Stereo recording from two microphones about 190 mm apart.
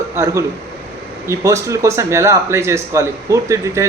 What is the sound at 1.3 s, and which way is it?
Speech, 15° right (ahead or behind).